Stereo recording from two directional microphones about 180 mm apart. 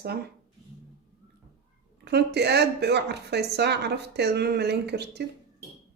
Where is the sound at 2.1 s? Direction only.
65° right (ahead or behind).